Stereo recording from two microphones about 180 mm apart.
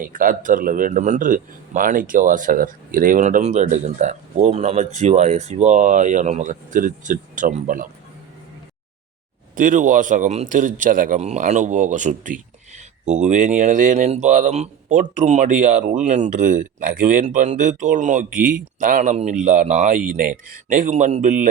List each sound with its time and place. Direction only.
0.0 s a man's voice: 50° right (ahead or behind)
9.6 s a man's voice: 45° right (ahead or behind)